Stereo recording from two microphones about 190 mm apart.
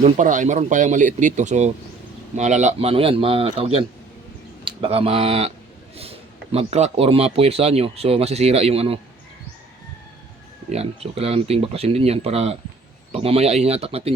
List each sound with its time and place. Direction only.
0.0 s speech: 40° right (ahead or behind)
10.7 s speech: 35° right (ahead or behind)